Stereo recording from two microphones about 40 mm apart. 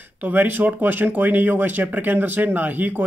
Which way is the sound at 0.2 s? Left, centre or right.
Right.